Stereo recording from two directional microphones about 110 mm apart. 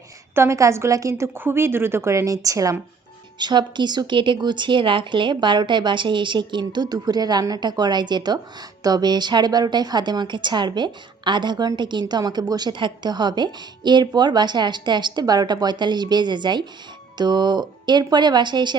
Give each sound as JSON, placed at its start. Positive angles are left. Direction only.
{"t": 0.3, "sound": "a woman's voice", "side_deg": -25}
{"t": 3.3, "sound": "a woman's voice", "side_deg": -40}